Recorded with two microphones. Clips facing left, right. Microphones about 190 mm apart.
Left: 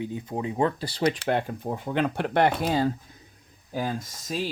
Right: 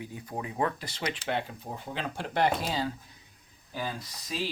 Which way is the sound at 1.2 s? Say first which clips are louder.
Left 6 dB; 50° left (ahead or behind).